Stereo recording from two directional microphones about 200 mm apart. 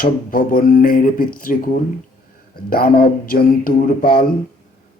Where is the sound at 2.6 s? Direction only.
45° left (ahead or behind).